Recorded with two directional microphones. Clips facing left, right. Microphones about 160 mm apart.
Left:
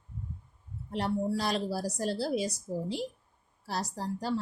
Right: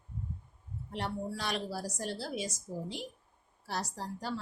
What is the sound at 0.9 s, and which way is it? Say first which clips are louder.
A woman's voice: left 7 dB; 35° left (ahead or behind).